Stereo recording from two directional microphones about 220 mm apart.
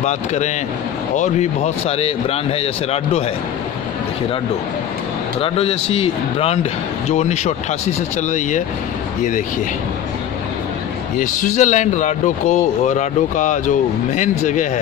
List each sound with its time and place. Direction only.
0.0 s a man's voice: 30° left (ahead or behind)
5.4 s a man's voice: 25° left (ahead or behind)
11.1 s a man's voice: 35° left (ahead or behind)